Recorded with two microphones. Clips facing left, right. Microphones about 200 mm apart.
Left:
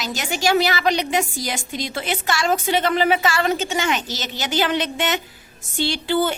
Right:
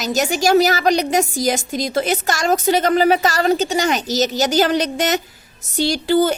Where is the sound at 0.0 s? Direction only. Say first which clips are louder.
Right 5 dB; 45° right (ahead or behind).